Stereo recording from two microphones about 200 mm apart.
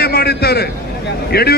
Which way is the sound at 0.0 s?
55° left (ahead or behind).